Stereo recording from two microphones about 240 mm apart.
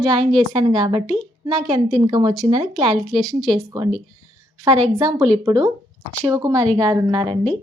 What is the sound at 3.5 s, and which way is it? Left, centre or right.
Speech, centre.